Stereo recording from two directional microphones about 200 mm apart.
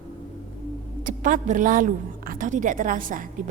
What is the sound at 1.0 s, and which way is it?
A woman's voice, 40° right (ahead or behind).